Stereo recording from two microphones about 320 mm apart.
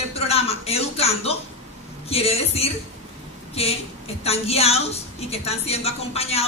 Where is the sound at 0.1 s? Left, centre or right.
Centre.